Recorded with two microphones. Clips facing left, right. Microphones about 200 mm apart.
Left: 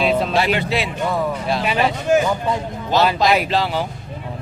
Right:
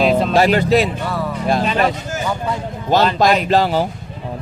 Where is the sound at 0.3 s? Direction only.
40° right (ahead or behind).